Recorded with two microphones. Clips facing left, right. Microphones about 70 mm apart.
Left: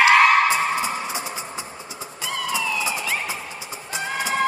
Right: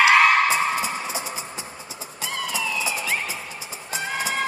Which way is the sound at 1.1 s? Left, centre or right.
Left.